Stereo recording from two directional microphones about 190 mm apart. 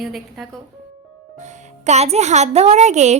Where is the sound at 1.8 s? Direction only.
35° right (ahead or behind).